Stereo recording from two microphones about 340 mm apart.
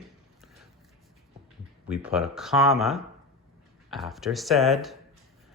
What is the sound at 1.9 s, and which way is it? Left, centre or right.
Speech, centre.